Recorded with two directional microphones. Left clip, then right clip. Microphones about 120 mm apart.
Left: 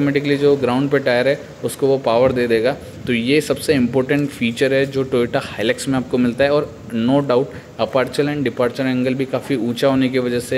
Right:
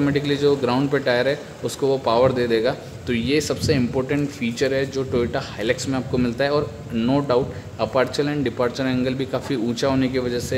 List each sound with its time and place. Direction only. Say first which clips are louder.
0.0 s a man's voice: left 4 dB; 10° left (ahead or behind)